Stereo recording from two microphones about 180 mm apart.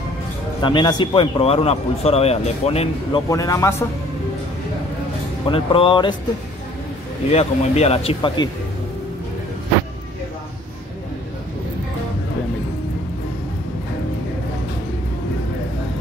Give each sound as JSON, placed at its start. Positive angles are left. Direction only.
{"t": 0.6, "sound": "speech", "side_deg": 25}
{"t": 3.3, "sound": "a man's voice", "side_deg": 20}
{"t": 5.5, "sound": "speech", "side_deg": 30}
{"t": 7.2, "sound": "speech", "side_deg": 35}